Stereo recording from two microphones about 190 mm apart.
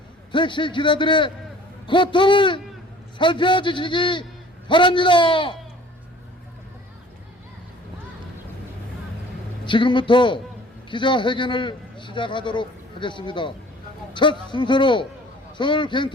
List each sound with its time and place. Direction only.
0.3 s a man's voice: 25° left (ahead or behind)
9.6 s a man's voice: 25° left (ahead or behind)